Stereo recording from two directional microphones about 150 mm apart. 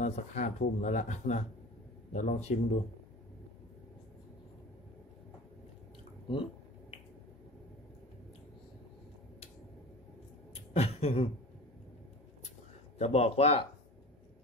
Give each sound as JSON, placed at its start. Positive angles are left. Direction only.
{"t": 0.0, "sound": "speech", "side_deg": 50}
{"t": 6.3, "sound": "speech", "side_deg": 35}
{"t": 10.7, "sound": "a sound", "side_deg": 45}
{"t": 13.0, "sound": "speech", "side_deg": 45}